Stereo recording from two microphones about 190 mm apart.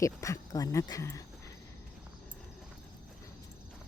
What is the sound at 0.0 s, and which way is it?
Speech, 15° left (ahead or behind).